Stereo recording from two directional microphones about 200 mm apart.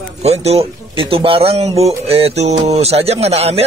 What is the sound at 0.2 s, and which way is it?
A man's voice, 30° right (ahead or behind).